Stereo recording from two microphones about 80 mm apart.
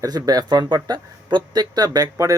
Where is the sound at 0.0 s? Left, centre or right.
Right.